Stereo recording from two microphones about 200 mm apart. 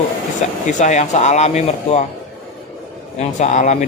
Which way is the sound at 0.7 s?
35° left (ahead or behind).